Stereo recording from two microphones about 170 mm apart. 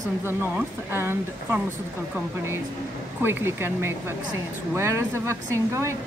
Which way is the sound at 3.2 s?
10° right (ahead or behind).